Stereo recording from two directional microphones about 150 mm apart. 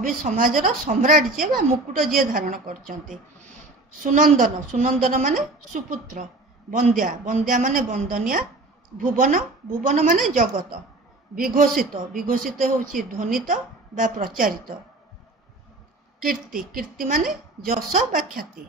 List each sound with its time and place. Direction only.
0.2 s a woman's voice: 65° right (ahead or behind)
4.0 s a woman's voice: 65° right (ahead or behind)
11.3 s a woman's voice: 65° right (ahead or behind)
16.2 s a woman's voice: 75° right (ahead or behind)